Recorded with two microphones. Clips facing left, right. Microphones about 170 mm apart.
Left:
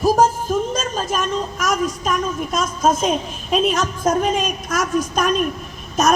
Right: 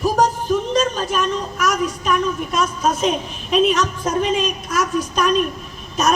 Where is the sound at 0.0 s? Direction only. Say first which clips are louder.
Left 2 dB; 45° left (ahead or behind).